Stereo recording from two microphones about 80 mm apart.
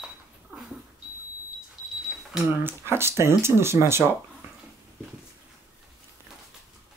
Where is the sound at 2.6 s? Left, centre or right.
Right.